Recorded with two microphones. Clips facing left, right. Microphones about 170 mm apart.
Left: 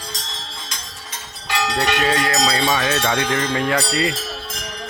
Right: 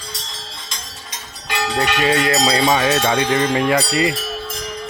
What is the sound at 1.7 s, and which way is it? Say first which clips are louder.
Bell: right 2 dB; 10° right (ahead or behind).